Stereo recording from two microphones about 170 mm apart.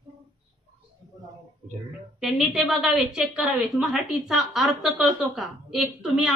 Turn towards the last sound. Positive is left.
turn(degrees=-5)  # may be behind; listen again after turning